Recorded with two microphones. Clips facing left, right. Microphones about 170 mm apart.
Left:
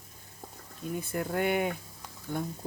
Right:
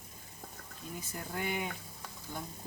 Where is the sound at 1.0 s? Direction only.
60° left (ahead or behind).